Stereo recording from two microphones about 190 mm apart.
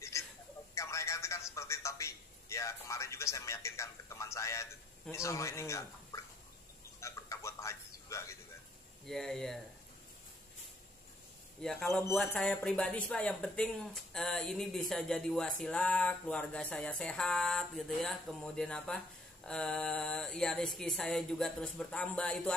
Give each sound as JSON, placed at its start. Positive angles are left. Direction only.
{"t": 0.1, "sound": "a sound", "side_deg": 15}
{"t": 0.7, "sound": "telephone", "side_deg": 15}
{"t": 5.1, "sound": "speech", "side_deg": 15}
{"t": 7.0, "sound": "music", "side_deg": 15}
{"t": 9.0, "sound": "speech", "side_deg": 0}
{"t": 11.6, "sound": "speech", "side_deg": 0}